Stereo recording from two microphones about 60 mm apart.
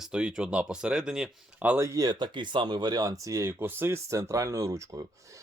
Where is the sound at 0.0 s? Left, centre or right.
Centre.